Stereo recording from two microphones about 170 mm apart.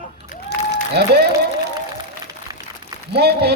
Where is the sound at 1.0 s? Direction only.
75° right (ahead or behind).